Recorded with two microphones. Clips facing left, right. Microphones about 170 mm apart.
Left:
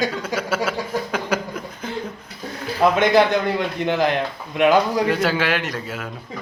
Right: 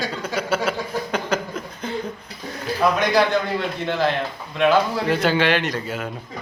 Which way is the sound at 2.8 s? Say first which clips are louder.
Left 3 dB; 25° left (ahead or behind).